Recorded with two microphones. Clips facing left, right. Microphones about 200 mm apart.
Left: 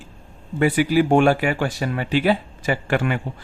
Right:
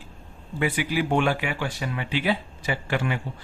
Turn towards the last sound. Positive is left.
turn(degrees=55)  # may be behind; listen again after turning